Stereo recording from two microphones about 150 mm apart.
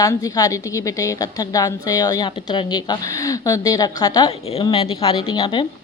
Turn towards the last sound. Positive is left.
turn(degrees=30)  # may be behind; listen again after turning